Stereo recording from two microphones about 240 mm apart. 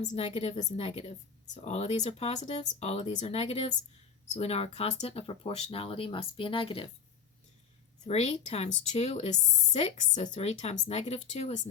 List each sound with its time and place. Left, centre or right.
0.0 s speech: left
8.0 s speech: left